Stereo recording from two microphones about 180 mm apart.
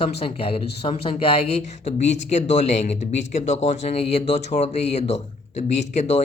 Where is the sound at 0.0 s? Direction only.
30° left (ahead or behind).